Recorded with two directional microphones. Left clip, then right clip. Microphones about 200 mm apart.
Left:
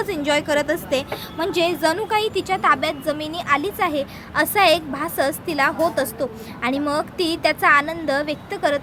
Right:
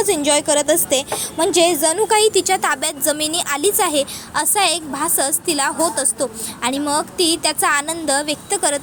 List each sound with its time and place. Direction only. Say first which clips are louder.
0.0 s a woman's voice: right 4 dB; 20° right (ahead or behind)
4.4 s a woman's voice: left 2 dB; 10° right (ahead or behind)